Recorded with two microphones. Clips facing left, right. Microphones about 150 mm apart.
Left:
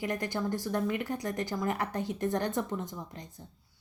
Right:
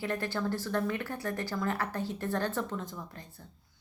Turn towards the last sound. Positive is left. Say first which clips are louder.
# left 2 dB
turn(degrees=15)  # may be behind; listen again after turning